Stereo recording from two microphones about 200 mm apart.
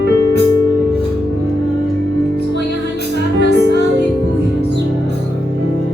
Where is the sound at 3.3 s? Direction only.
55° right (ahead or behind).